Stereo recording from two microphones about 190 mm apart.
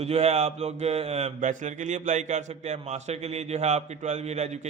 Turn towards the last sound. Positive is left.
turn(degrees=-35)  # may be behind; listen again after turning